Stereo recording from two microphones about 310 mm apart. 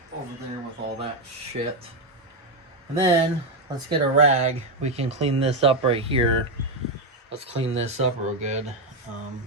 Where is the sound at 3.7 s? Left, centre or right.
Centre.